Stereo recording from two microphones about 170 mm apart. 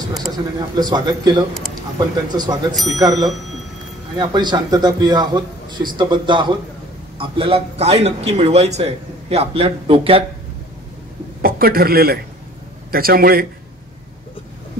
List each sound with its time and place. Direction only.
0.6 s a man's voice: 25° right (ahead or behind)
11.4 s a man's voice: 60° right (ahead or behind)